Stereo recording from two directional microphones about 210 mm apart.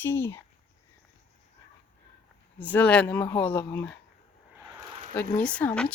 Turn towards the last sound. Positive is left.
turn(degrees=5)  # may be behind; listen again after turning